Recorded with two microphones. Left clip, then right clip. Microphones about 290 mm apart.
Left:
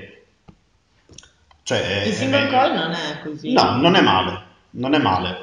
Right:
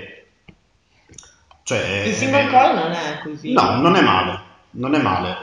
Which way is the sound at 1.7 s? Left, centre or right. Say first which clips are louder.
Even; left.